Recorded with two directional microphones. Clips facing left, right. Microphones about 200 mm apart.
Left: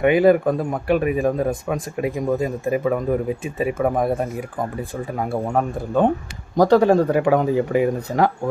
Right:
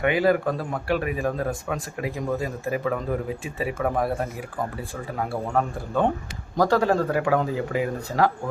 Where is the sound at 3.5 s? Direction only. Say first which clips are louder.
Left 4 dB; 20° left (ahead or behind).